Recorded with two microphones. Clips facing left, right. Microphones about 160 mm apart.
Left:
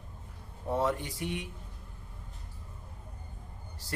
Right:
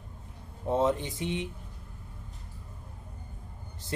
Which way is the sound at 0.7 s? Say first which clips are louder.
Right 4 dB; 20° right (ahead or behind).